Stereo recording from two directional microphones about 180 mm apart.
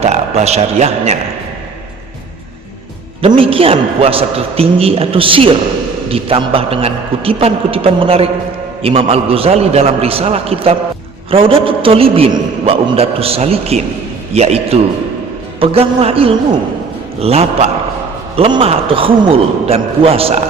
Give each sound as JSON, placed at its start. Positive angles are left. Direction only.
{"t": 0.0, "sound": "a man's voice", "side_deg": -35}
{"t": 3.2, "sound": "a man's voice", "side_deg": -30}